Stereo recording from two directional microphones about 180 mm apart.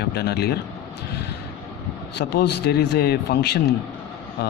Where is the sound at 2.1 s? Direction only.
70° left (ahead or behind).